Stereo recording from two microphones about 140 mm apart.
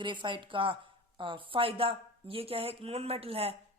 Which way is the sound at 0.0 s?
35° right (ahead or behind).